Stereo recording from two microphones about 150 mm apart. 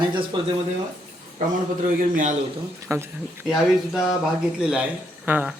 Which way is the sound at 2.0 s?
60° right (ahead or behind).